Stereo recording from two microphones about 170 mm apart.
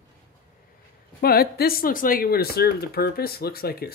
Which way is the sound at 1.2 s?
65° left (ahead or behind).